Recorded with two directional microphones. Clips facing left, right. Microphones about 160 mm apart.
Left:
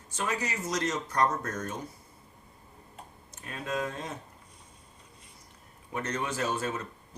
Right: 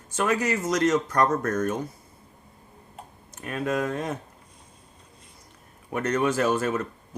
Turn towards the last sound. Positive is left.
turn(degrees=-70)  # may be behind; listen again after turning